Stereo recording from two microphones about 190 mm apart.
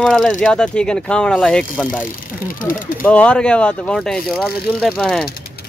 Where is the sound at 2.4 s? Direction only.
45° left (ahead or behind).